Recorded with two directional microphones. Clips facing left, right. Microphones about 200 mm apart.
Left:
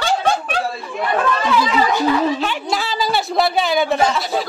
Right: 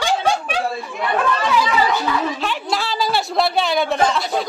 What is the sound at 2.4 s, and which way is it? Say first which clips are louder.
A woman's voice: left 1 dB; centre (ahead or behind).